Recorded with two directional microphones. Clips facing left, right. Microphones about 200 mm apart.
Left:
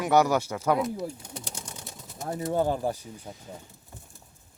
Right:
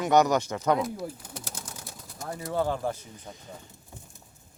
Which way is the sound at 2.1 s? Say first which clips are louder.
Left 3 dB; 20° left (ahead or behind).